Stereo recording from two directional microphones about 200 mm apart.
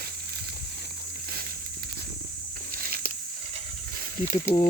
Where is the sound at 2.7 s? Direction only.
45° right (ahead or behind).